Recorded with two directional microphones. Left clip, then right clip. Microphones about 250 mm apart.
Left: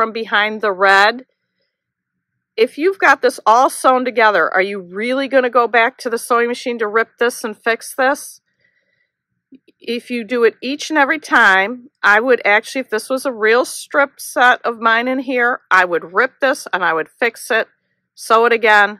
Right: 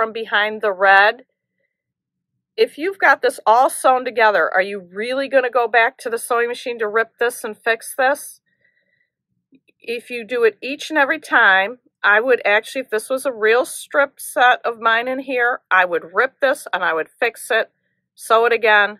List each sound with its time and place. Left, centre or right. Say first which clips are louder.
0.0 s speech: left 3 dB; left
2.5 s speech: left 4 dB; left
9.5 s speech: left 3 dB; left